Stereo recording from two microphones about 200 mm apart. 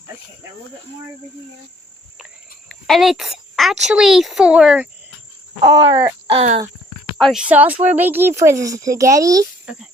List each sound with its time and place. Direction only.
2.6 s a woman's voice: centre (ahead or behind)
5.7 s speech: 15° right (ahead or behind)
6.2 s speech: 30° right (ahead or behind)
7.2 s a woman's voice: centre (ahead or behind); by 9.5 s 15° right (ahead or behind)